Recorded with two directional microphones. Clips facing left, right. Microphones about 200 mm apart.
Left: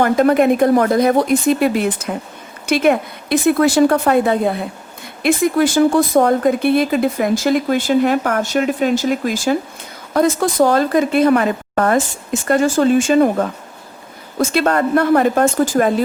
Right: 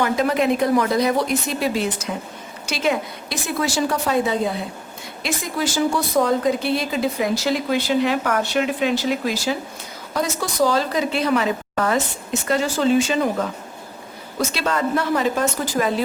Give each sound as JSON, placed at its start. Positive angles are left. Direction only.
{"t": 0.0, "sound": "speech", "side_deg": 50}